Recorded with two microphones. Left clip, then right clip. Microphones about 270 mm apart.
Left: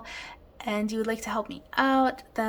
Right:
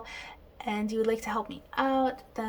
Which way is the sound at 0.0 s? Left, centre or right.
Centre.